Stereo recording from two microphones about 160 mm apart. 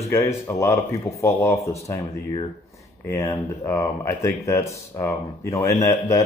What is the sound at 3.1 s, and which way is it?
Speech, 20° left (ahead or behind).